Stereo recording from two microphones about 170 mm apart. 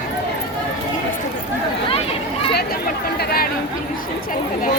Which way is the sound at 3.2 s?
65° left (ahead or behind).